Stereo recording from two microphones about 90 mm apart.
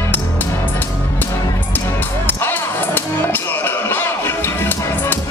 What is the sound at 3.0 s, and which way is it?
Music, 20° left (ahead or behind).